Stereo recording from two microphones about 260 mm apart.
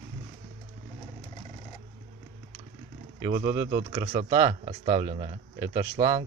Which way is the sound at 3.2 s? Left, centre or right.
Centre.